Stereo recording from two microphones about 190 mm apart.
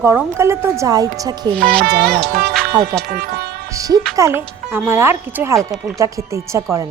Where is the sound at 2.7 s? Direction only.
20° right (ahead or behind).